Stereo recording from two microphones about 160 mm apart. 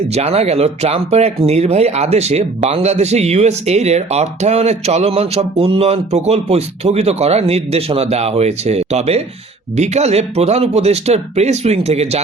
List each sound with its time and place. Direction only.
0.1 s speech: 40° right (ahead or behind)